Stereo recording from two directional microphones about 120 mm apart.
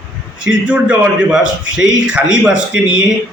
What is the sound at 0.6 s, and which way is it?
A man's voice, 10° right (ahead or behind).